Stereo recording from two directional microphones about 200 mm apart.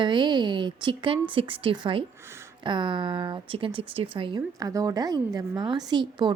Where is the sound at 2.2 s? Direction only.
10° right (ahead or behind).